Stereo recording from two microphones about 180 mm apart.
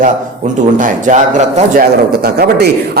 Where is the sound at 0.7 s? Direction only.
45° right (ahead or behind).